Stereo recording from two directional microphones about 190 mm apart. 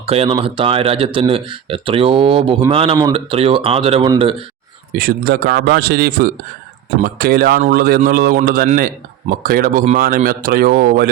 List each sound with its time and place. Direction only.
0.0 s speech: 30° right (ahead or behind)
4.9 s a man's voice: 50° right (ahead or behind)